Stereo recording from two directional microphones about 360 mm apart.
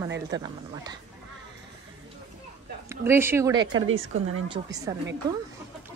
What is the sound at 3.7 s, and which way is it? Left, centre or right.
Speech, right.